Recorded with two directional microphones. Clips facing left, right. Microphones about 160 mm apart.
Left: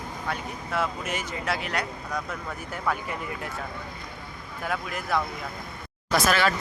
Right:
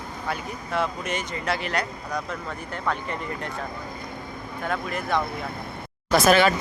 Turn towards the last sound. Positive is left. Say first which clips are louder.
# right 5 dB
turn(degrees=-20)  # may be behind; listen again after turning